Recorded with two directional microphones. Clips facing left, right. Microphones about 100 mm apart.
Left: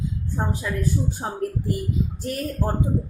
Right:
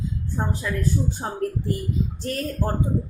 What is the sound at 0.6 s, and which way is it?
Speech, 10° left (ahead or behind).